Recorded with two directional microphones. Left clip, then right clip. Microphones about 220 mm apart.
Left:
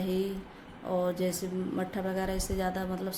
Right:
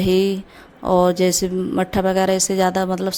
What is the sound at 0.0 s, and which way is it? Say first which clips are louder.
Speech: right 15 dB; 45° right (ahead or behind).